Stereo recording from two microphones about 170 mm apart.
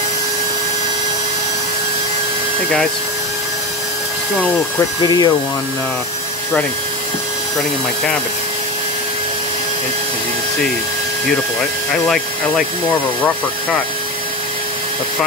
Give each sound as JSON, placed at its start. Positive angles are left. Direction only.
{"t": 5.0, "sound": "speech", "side_deg": 25}